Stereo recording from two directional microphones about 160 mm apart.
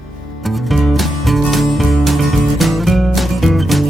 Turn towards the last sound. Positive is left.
turn(degrees=0)  # may be behind; listen again after turning